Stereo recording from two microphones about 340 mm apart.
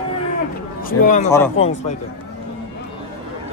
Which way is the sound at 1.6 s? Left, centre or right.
Centre.